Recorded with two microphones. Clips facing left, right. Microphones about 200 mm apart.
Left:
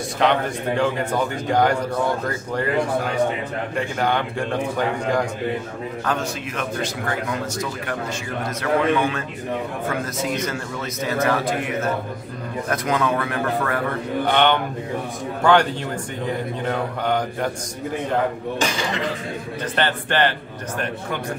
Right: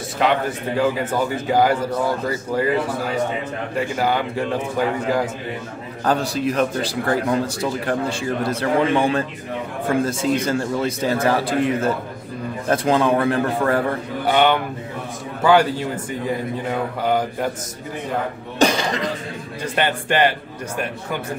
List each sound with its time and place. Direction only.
0.2 s a man's voice: 5° right (ahead or behind)
3.9 s a man's voice: 5° right (ahead or behind)
6.0 s a man's voice: 35° right (ahead or behind)
14.2 s speech: 5° right (ahead or behind)
18.6 s a man's voice: 40° right (ahead or behind)
19.6 s speech: 10° right (ahead or behind)